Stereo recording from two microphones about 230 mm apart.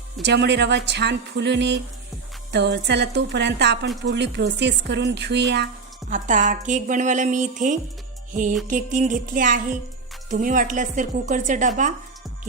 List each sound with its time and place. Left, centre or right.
0.2 s speech: right
6.1 s speech: right